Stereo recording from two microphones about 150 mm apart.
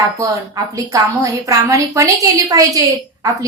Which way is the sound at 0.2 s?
20° right (ahead or behind).